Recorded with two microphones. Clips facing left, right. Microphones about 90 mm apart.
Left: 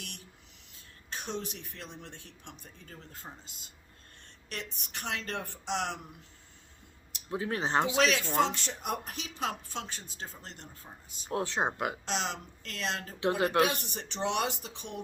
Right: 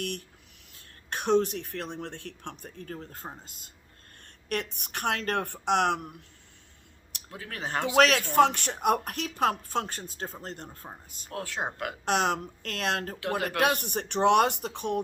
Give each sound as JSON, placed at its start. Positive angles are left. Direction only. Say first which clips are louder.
{"t": 0.0, "sound": "speech", "louder": "right 13 dB", "side_deg": -55}
{"t": 4.4, "sound": "speech", "louder": "right 9 dB", "side_deg": -60}
{"t": 7.3, "sound": "speech", "louder": "left 5 dB", "side_deg": 20}
{"t": 7.9, "sound": "speech", "louder": "right 11 dB", "side_deg": -60}
{"t": 11.3, "sound": "speech", "louder": "left 3 dB", "side_deg": 25}
{"t": 12.0, "sound": "speech", "louder": "right 8 dB", "side_deg": -55}